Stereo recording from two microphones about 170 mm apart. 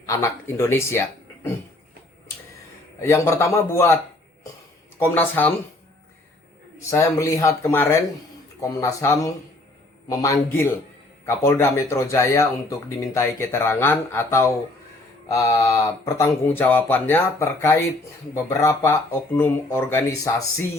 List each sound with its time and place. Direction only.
0.0 s speech: 20° left (ahead or behind)
3.0 s speech: 15° left (ahead or behind)
4.9 s speech: 10° left (ahead or behind)
6.7 s a man's voice: 20° left (ahead or behind)